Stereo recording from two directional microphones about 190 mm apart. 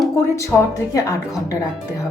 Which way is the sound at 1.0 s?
20° left (ahead or behind).